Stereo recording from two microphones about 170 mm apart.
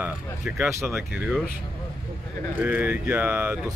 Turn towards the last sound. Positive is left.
turn(degrees=-10)  # may be behind; listen again after turning